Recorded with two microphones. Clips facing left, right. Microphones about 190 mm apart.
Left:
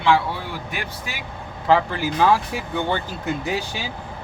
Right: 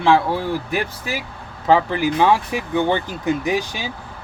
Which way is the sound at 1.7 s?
20° right (ahead or behind).